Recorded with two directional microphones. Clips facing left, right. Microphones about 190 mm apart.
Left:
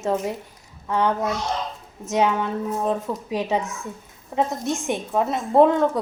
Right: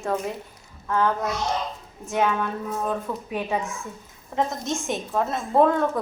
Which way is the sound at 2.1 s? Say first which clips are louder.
Left 3 dB; 20° left (ahead or behind).